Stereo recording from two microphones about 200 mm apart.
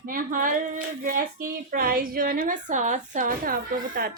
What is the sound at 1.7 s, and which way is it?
Speech, 45° right (ahead or behind).